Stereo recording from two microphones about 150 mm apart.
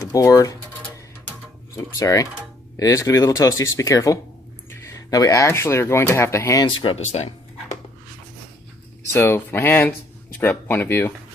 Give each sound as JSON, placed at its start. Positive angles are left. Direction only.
{"t": 0.0, "sound": "speech", "side_deg": 20}
{"t": 1.7, "sound": "speech", "side_deg": 20}
{"t": 6.7, "sound": "speech", "side_deg": 40}
{"t": 9.1, "sound": "speech", "side_deg": 15}